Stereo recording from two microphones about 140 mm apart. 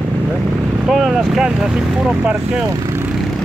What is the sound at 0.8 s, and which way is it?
Speech, 5° right (ahead or behind).